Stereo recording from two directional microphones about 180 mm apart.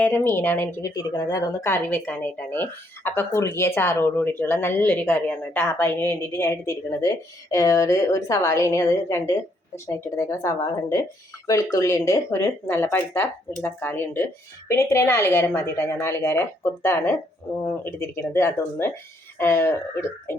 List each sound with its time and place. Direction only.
0.0 s a woman's voice: 10° left (ahead or behind)